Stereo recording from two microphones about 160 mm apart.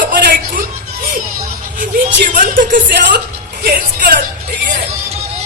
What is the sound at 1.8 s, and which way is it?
Speech, 60° right (ahead or behind).